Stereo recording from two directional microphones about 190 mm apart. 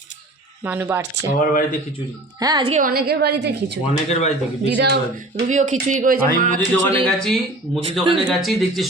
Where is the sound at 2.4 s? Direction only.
20° right (ahead or behind).